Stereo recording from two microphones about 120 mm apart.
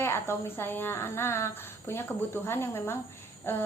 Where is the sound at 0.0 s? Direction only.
20° left (ahead or behind).